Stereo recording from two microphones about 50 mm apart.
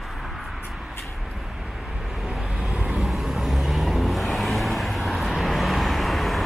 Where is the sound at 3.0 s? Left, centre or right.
Centre.